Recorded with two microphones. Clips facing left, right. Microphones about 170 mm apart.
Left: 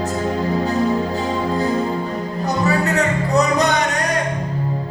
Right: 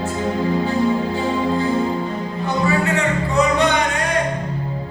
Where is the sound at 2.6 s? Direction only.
40° left (ahead or behind).